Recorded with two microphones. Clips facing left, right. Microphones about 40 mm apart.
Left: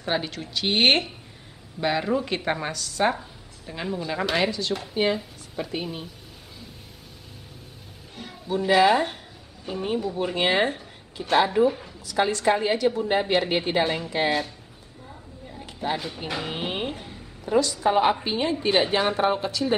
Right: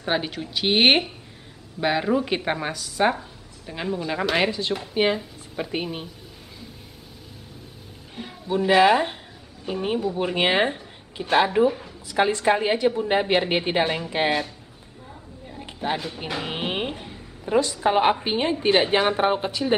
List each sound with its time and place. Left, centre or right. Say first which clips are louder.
0.0 s speech: right 2 dB; centre
4.4 s a woman's voice: right 2 dB; right
8.2 s a woman's voice: right 3 dB; centre
12.1 s a woman's voice: right 2 dB; right
15.6 s a sound: right 1 dB; centre
17.6 s a woman's voice: right 1 dB; right